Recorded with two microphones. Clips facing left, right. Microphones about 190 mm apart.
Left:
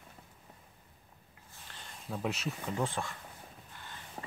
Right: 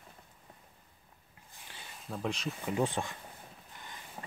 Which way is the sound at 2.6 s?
15° right (ahead or behind).